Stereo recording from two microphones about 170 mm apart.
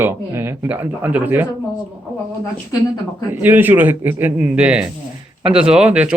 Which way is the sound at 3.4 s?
10° right (ahead or behind).